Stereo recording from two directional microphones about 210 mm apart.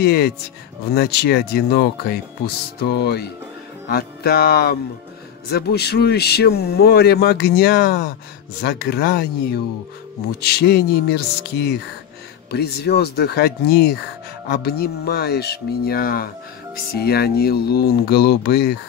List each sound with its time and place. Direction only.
0.0 s speech: 50° left (ahead or behind)